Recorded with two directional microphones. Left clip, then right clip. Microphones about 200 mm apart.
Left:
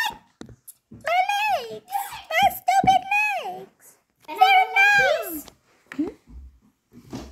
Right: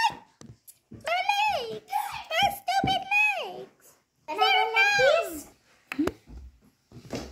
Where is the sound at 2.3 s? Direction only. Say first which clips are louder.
Left 7 dB; 20° left (ahead or behind).